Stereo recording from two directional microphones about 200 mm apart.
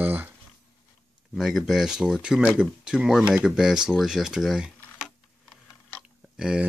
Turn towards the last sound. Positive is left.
turn(degrees=-5)  # may be behind; listen again after turning